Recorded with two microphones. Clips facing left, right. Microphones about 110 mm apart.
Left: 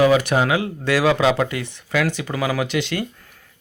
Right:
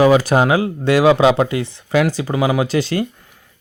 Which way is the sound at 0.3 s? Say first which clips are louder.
Right 4 dB; 35° right (ahead or behind).